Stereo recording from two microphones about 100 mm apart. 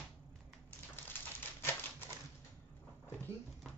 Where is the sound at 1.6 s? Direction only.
25° left (ahead or behind).